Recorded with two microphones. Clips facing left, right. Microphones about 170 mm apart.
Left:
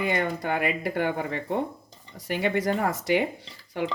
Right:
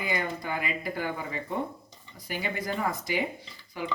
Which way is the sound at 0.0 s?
60° left (ahead or behind).